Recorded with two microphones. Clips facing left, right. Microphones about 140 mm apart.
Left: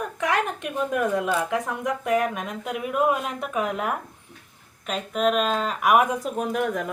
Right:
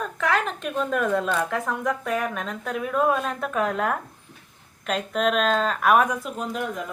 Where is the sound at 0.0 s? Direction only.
15° left (ahead or behind).